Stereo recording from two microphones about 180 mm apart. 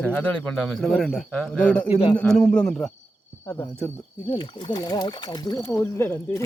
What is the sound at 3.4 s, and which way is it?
Speech, 15° left (ahead or behind).